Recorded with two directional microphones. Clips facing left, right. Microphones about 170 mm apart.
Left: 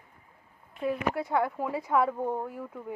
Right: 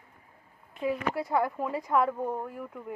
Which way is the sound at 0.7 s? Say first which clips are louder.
Even; 5° right (ahead or behind).